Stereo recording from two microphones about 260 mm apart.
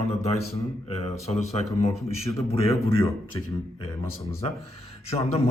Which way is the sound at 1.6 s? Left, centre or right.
Left.